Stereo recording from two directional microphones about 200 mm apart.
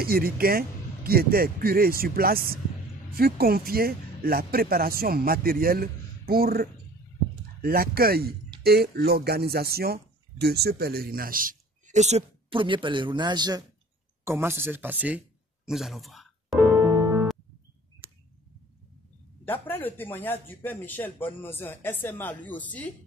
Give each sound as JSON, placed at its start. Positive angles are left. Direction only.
{"t": 0.0, "sound": "a man's voice", "side_deg": -50}
{"t": 16.6, "sound": "music", "side_deg": -20}
{"t": 19.4, "sound": "speech", "side_deg": 10}